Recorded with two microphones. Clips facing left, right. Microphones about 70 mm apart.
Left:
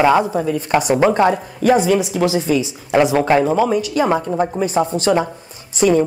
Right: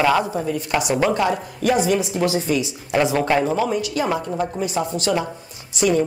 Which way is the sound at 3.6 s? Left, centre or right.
Left.